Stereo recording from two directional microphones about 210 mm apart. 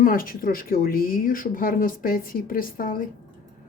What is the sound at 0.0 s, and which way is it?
Speech, 40° left (ahead or behind).